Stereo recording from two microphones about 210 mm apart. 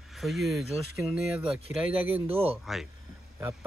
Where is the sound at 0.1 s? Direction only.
Centre (ahead or behind).